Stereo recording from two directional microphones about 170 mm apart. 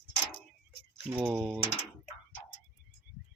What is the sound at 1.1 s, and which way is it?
Speech, 10° right (ahead or behind).